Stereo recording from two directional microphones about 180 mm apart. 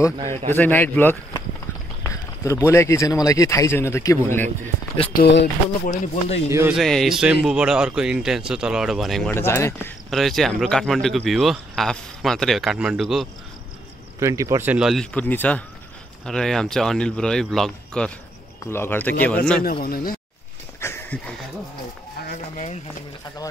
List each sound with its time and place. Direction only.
0.6 s speech: 10° left (ahead or behind)
5.1 s speech: 65° left (ahead or behind)
5.9 s speech: 35° left (ahead or behind)
6.8 s speech: centre (ahead or behind)
9.3 s speech: 15° left (ahead or behind)
10.0 s speech: centre (ahead or behind)
14.2 s speech: 15° right (ahead or behind); by 19.6 s 5° left (ahead or behind)
19.6 s speech: 55° left (ahead or behind)
20.8 s a sound: 15° left (ahead or behind)
22.3 s speech: 40° left (ahead or behind)